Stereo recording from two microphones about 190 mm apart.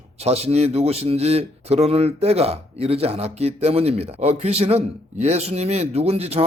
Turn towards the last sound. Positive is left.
turn(degrees=-30)  # may be behind; listen again after turning